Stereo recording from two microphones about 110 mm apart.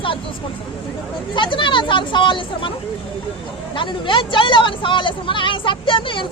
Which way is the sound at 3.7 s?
50° left (ahead or behind).